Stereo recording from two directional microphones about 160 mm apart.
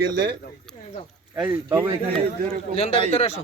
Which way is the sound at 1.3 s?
5° right (ahead or behind).